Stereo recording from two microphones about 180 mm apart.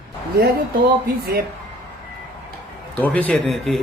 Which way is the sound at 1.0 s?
60° right (ahead or behind).